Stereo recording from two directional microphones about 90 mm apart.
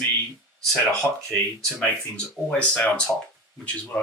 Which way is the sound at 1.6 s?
5° left (ahead or behind).